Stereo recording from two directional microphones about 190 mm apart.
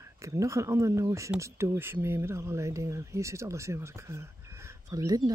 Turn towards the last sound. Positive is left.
turn(degrees=-20)  # may be behind; listen again after turning